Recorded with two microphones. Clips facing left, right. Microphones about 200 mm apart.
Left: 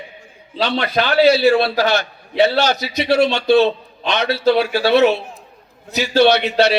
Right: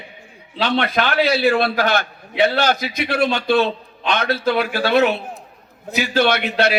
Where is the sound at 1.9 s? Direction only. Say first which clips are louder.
Left 1 dB; 50° right (ahead or behind).